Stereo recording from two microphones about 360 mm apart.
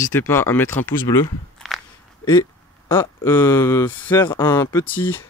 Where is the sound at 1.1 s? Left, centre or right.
Centre.